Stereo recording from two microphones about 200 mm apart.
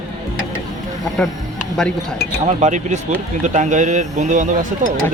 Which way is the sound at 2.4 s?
35° right (ahead or behind).